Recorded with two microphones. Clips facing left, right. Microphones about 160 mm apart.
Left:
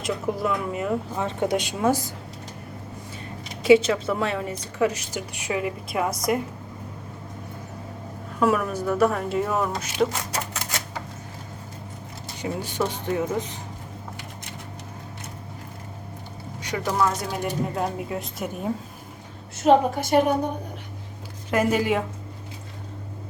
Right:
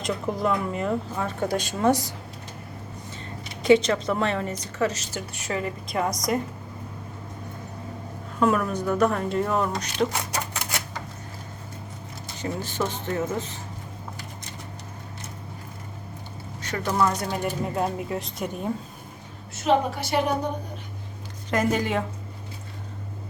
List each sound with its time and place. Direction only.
0.0 s speech: 5° left (ahead or behind)
1.2 s speech: 20° left (ahead or behind)
1.8 s speech: 5° left (ahead or behind)
3.6 s speech: 5° left (ahead or behind)
8.4 s speech: 5° left (ahead or behind)
12.4 s speech: 15° left (ahead or behind)
16.6 s a sound: 15° left (ahead or behind)
17.1 s speech: centre (ahead or behind)
19.6 s a woman's voice: 45° left (ahead or behind)
21.5 s speech: 10° left (ahead or behind)